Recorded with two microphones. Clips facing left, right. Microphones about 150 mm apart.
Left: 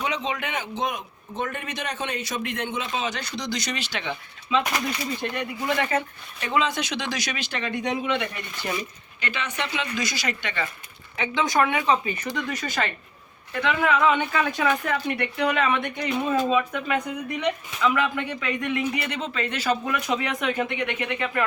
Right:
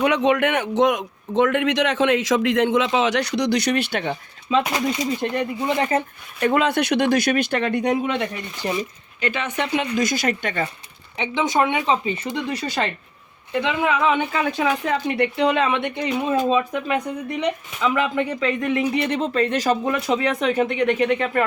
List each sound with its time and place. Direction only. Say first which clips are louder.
0.0 s a man's voice: right 10 dB; 65° right (ahead or behind); by 4.6 s 40° right (ahead or behind)
4.7 s speech: right 5 dB; 25° right (ahead or behind)
6.4 s speech: right 6 dB; 55° right (ahead or behind)
8.6 s speech: right 5 dB; 25° right (ahead or behind)
9.2 s speech: right 6 dB; 45° right (ahead or behind)
11.2 s speech: right 2 dB; 20° right (ahead or behind)
13.5 s speech: right 2 dB; 20° right (ahead or behind)
16.0 s speech: right 2 dB; 10° right (ahead or behind)
16.5 s speech: right 3 dB; 25° right (ahead or behind)